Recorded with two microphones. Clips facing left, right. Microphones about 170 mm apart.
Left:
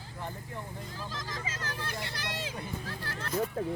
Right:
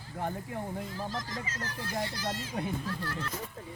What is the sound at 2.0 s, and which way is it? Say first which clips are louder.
Speech: right 2 dB; 65° left (ahead or behind).